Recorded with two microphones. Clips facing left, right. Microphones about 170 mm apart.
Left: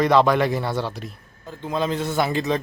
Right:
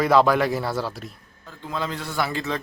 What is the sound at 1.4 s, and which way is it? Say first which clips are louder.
A man's voice: left 5 dB; 20° left (ahead or behind).